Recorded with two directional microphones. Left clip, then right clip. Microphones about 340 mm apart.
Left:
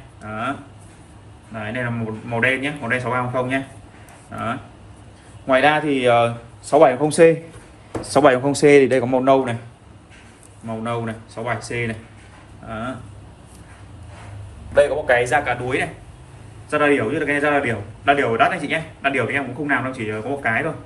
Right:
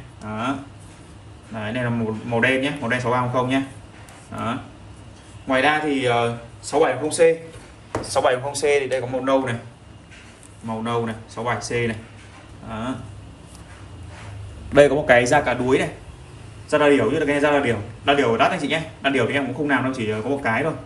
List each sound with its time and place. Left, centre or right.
0.2 s a sound: centre
1.5 s a man's voice: centre
5.5 s a man's voice: centre; by 8.9 s left
9.2 s speech: centre
10.7 s a man's voice: centre
12.6 s a sound: centre
14.8 s a man's voice: centre